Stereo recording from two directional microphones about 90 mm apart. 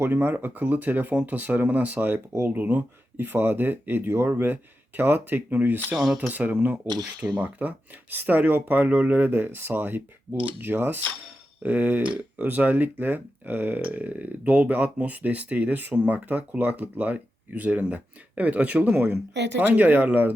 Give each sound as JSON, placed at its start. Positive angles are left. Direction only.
{"t": 0.0, "sound": "speech", "side_deg": -25}
{"t": 5.9, "sound": "speech", "side_deg": 0}
{"t": 6.1, "sound": "speech", "side_deg": -20}
{"t": 6.9, "sound": "speech", "side_deg": -50}
{"t": 7.6, "sound": "speech", "side_deg": -20}